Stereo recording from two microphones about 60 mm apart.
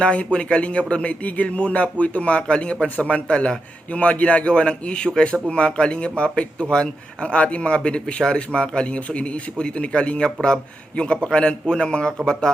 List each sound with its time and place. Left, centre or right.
0.0 s speech: centre